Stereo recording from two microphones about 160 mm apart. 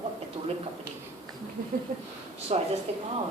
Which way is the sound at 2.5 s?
45° right (ahead or behind).